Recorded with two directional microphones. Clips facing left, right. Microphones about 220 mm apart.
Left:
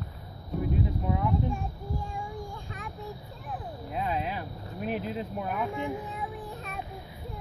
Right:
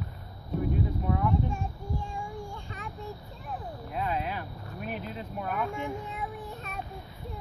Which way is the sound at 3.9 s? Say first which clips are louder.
Left 1 dB; 25° left (ahead or behind).